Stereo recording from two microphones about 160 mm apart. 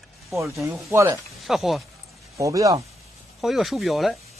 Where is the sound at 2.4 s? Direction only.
20° right (ahead or behind).